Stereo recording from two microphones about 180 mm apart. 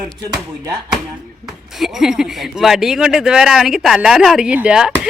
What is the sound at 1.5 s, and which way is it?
Speech, centre (ahead or behind).